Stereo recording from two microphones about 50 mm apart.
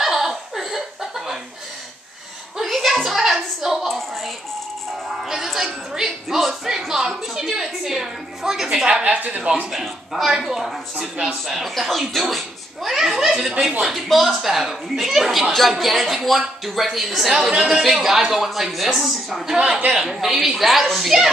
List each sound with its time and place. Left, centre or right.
0.0 s a sound: centre
2.5 s a sound: centre
5.3 s music: centre
6.4 s a sound: centre
8.8 s a woman's voice: right
9.5 s speech: centre
11.4 s a child's voice: centre
17.5 s a child's voice: centre
19.4 s a child's voice: centre